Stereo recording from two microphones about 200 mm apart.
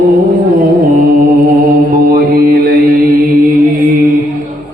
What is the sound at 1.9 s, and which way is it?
Mantra, 50° right (ahead or behind).